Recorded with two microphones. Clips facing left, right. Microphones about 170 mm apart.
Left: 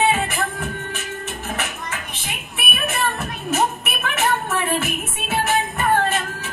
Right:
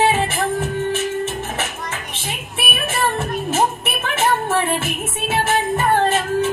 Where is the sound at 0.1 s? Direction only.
25° right (ahead or behind).